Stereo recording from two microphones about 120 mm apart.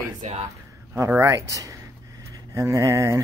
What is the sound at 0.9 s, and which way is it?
Speech, 20° right (ahead or behind).